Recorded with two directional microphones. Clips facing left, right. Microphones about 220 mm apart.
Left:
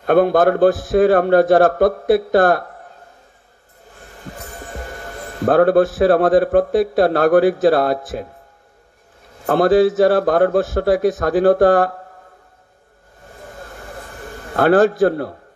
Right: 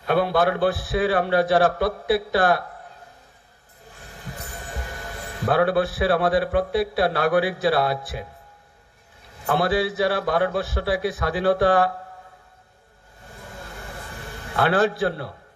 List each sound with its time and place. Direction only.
0.0 s a man's voice: 50° left (ahead or behind)
5.1 s a man's voice: 45° left (ahead or behind)
9.5 s a man's voice: 45° left (ahead or behind)
14.4 s a man's voice: 45° left (ahead or behind)